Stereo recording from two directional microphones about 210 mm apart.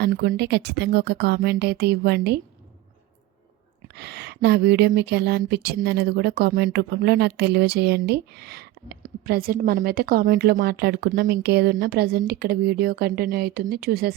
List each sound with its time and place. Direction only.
0.0 s a woman's voice: 50° right (ahead or behind)
3.9 s a woman's voice: 50° right (ahead or behind)